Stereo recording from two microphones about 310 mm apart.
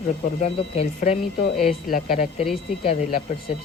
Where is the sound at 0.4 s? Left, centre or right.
Left.